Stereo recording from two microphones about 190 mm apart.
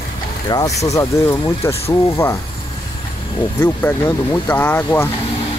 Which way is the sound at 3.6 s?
10° left (ahead or behind).